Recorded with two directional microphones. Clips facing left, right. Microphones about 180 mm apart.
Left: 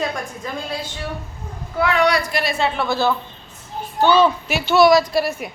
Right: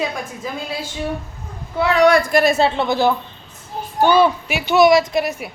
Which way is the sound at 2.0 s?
50° right (ahead or behind).